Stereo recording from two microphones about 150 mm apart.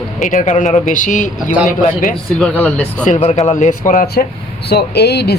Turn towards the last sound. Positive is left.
turn(degrees=90)